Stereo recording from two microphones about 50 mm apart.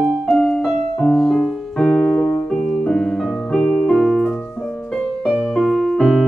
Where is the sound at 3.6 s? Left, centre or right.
Left.